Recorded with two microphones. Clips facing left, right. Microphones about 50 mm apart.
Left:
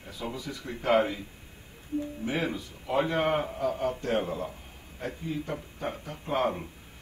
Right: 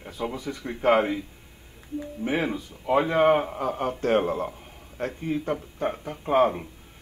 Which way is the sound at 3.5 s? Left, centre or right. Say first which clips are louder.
Right 2 dB; right.